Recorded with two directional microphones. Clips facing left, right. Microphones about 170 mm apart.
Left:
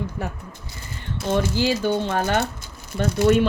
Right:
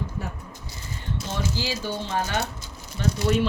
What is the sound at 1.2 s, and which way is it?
A woman's voice, 55° left (ahead or behind).